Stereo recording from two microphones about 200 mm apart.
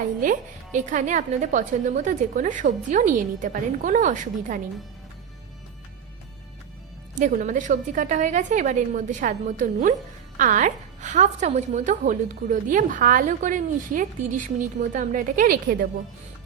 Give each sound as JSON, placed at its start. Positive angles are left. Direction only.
{"t": 0.2, "sound": "a woman's voice", "side_deg": -40}
{"t": 7.2, "sound": "a woman's voice", "side_deg": -40}